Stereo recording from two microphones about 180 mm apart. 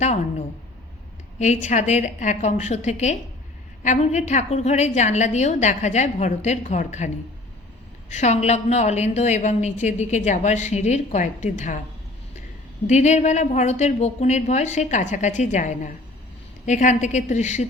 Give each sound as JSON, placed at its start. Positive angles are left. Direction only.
{"t": 0.0, "sound": "a woman's voice", "side_deg": 40}
{"t": 1.6, "sound": "a woman's voice", "side_deg": 40}
{"t": 8.1, "sound": "a woman's voice", "side_deg": 40}
{"t": 12.9, "sound": "a woman's voice", "side_deg": 40}